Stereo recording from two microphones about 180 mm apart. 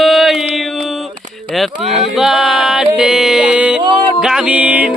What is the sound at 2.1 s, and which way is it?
Music, centre (ahead or behind).